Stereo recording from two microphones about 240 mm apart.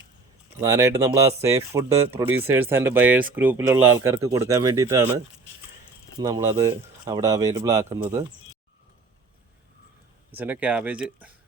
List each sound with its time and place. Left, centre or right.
0.6 s speech: centre
6.1 s speech: centre
10.3 s speech: centre